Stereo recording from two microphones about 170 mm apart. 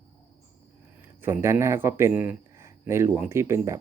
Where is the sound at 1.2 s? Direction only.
15° right (ahead or behind).